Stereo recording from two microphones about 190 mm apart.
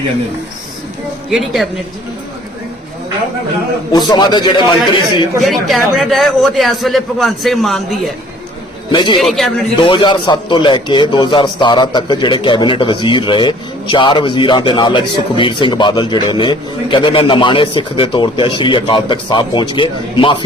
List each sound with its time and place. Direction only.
1.3 s a man's voice: centre (ahead or behind)
3.9 s a man's voice: 25° left (ahead or behind)
5.4 s a man's voice: centre (ahead or behind)
8.9 s a man's voice: 25° left (ahead or behind)
9.1 s a man's voice: centre (ahead or behind)
9.7 s a man's voice: 25° left (ahead or behind)